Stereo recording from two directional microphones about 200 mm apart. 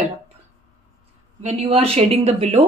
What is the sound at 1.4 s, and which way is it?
Speech, 30° right (ahead or behind).